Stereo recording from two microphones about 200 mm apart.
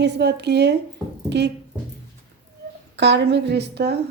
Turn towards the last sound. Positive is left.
turn(degrees=-55)  # may be behind; listen again after turning